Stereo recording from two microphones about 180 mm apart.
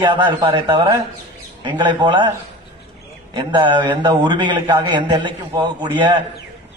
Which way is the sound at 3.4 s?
25° right (ahead or behind).